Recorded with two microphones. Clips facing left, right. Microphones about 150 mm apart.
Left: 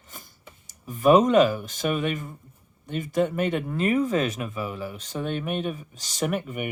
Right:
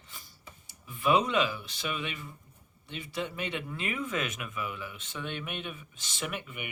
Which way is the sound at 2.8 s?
45° left (ahead or behind).